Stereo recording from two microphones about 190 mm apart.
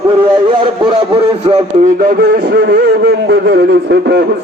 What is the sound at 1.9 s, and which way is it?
A man's voice, 50° right (ahead or behind).